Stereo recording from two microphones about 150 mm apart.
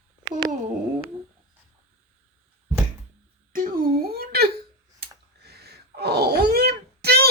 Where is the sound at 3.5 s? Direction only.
70° right (ahead or behind); by 4.5 s 90° right.